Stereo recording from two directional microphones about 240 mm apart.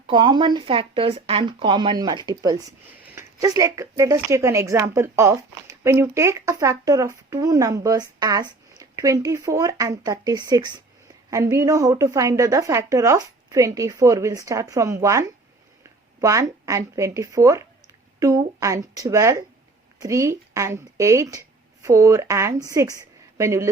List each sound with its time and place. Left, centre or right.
0.1 s a woman's voice: centre